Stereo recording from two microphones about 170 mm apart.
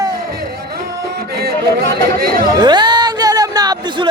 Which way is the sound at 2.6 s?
25° right (ahead or behind).